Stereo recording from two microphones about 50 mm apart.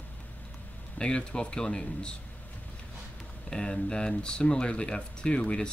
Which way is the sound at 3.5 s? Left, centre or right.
Centre.